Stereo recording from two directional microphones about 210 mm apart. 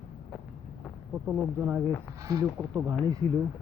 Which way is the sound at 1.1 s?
5° right (ahead or behind).